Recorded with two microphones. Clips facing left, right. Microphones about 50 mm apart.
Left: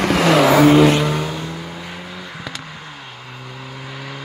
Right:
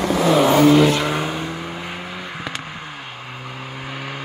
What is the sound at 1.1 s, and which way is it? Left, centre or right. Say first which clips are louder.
Vehicle: even; right.